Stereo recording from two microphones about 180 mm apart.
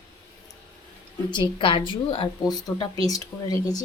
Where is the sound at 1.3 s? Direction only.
25° left (ahead or behind).